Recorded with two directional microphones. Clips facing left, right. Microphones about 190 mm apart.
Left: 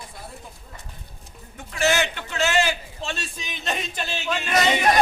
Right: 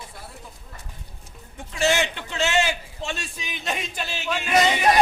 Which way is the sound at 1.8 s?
20° right (ahead or behind).